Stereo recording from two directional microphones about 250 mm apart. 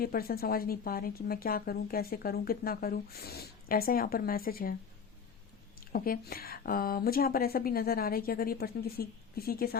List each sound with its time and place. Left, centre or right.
0.0 s a woman's voice: left
5.9 s a woman's voice: left